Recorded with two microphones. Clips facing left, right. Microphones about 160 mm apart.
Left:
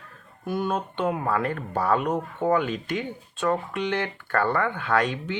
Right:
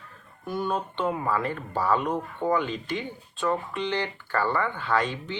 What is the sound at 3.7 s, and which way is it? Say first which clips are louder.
Speech: left 2 dB; 60° left (ahead or behind).